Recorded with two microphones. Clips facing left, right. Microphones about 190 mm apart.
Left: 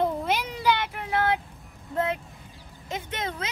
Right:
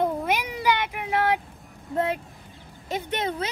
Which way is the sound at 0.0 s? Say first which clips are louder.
Right 1 dB; 10° right (ahead or behind).